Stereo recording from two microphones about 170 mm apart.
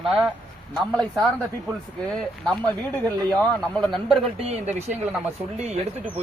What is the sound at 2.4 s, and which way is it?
A man's voice, 5° left (ahead or behind).